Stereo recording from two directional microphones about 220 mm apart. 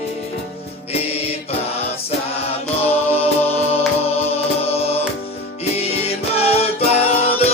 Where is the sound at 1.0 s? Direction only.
25° left (ahead or behind).